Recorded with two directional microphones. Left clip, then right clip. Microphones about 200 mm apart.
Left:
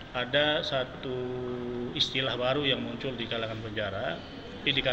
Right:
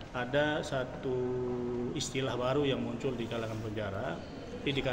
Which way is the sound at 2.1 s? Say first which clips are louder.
Right 1 dB; 15° right (ahead or behind).